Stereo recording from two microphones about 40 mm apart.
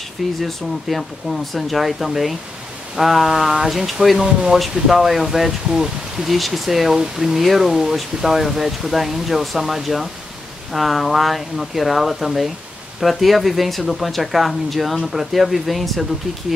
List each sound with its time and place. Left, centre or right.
0.4 s speech: centre
6.3 s speech: centre